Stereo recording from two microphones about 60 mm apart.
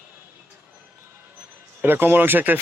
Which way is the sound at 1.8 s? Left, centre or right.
Right.